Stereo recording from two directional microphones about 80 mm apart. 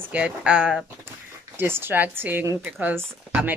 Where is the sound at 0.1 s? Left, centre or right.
Centre.